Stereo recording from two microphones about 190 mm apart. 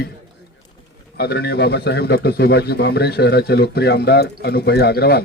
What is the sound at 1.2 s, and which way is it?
Speech, 60° left (ahead or behind).